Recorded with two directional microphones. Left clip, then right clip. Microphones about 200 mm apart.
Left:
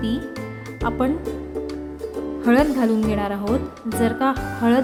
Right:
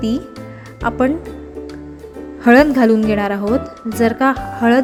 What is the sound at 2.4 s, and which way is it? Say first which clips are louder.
A woman's voice: right 8 dB; 25° right (ahead or behind).